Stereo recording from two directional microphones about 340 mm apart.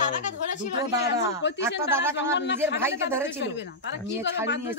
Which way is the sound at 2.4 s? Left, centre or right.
Left.